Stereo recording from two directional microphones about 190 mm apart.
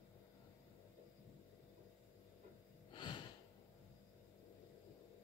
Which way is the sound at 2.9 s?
25° left (ahead or behind).